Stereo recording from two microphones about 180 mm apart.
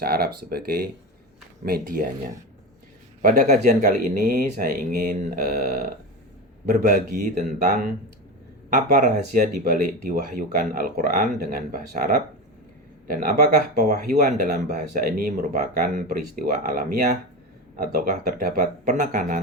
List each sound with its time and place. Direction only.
0.0 s speech: 60° right (ahead or behind)
3.2 s speech: 45° right (ahead or behind)
6.7 s speech: 45° right (ahead or behind)